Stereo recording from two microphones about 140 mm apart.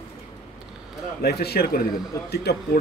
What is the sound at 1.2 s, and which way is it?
Speech, 90° left.